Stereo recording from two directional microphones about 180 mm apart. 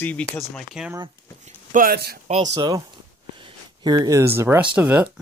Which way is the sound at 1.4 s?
50° right (ahead or behind).